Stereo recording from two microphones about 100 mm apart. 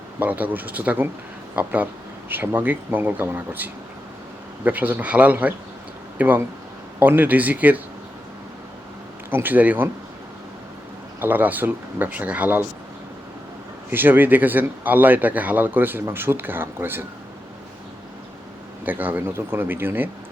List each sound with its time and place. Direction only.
0.2 s speech: 15° right (ahead or behind)
9.3 s speech: 20° right (ahead or behind)
11.2 s speech: 20° right (ahead or behind)
13.9 s speech: 20° right (ahead or behind)
18.9 s speech: 20° right (ahead or behind)